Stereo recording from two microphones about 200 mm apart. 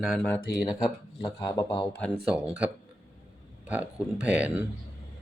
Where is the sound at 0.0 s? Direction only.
Centre (ahead or behind).